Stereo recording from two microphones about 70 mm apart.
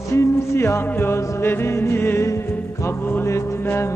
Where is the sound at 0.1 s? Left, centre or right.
Left.